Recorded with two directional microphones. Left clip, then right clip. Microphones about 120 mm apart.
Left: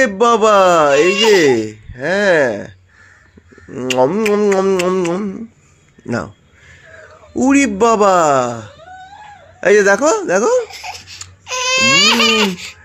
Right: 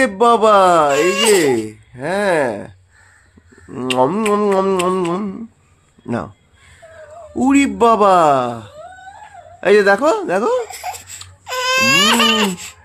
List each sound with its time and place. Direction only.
0.0 s a man's voice: 5° left (ahead or behind)
0.9 s speech: 30° right (ahead or behind)
1.3 s speech: 10° left (ahead or behind)
3.8 s music: 10° right (ahead or behind)
4.9 s a man's voice: 5° right (ahead or behind)
6.1 s a man's voice: 5° left (ahead or behind)
7.3 s a man's voice: centre (ahead or behind)
11.8 s baby cry: 30° right (ahead or behind)